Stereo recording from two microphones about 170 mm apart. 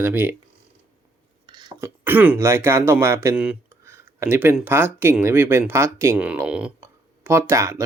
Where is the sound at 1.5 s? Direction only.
25° right (ahead or behind).